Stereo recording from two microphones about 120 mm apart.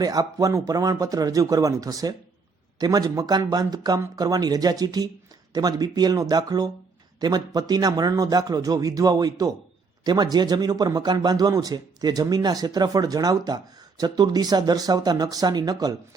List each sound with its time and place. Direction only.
0.0 s speech: 30° right (ahead or behind)